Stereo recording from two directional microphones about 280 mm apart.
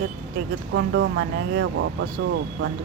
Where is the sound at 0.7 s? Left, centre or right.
Right.